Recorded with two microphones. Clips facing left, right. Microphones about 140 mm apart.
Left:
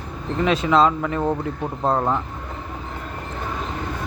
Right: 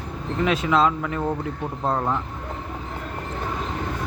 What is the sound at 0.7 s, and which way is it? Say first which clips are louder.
Speech: left 4 dB; 30° left (ahead or behind).